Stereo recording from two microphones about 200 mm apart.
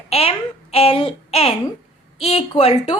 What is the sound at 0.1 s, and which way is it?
A child's voice, 30° left (ahead or behind).